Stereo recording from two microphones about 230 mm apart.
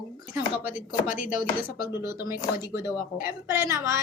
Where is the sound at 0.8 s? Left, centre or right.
Left.